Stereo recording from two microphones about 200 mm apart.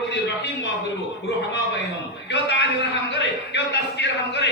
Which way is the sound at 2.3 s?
60° left (ahead or behind).